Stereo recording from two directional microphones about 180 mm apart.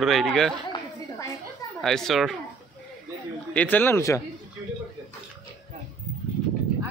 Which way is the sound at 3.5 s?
10° left (ahead or behind).